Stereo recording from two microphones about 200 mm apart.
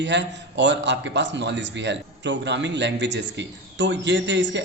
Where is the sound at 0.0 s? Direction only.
60° right (ahead or behind).